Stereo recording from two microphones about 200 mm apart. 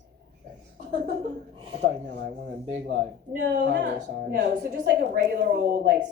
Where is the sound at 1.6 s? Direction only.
25° right (ahead or behind).